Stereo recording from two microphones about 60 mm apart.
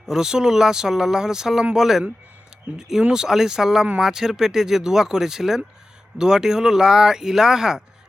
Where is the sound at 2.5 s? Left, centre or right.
Centre.